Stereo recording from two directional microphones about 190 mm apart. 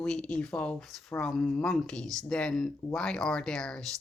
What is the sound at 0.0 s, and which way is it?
Speech, 5° left (ahead or behind).